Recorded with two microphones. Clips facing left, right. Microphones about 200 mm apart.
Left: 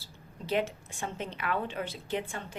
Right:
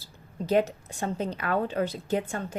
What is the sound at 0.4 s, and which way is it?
A woman's voice, 40° right (ahead or behind).